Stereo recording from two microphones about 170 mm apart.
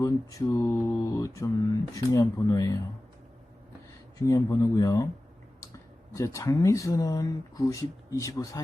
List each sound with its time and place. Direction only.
0.0 s mantra: 20° left (ahead or behind)
2.0 s speech: 20° left (ahead or behind)
4.3 s speech: 20° left (ahead or behind)